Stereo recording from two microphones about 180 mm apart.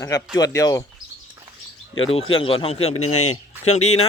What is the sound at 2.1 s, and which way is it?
Speech, 30° left (ahead or behind).